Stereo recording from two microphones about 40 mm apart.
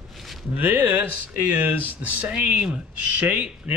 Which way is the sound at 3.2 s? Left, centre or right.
Right.